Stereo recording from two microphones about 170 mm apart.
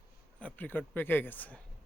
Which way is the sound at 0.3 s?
10° left (ahead or behind).